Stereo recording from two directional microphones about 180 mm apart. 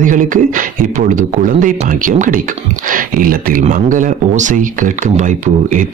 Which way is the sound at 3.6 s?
45° right (ahead or behind).